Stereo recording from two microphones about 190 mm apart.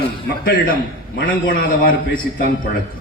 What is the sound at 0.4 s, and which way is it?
A man's voice, 50° left (ahead or behind).